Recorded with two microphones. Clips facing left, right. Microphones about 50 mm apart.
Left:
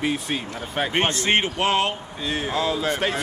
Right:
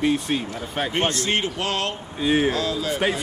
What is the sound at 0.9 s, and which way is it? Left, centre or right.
Speech, left.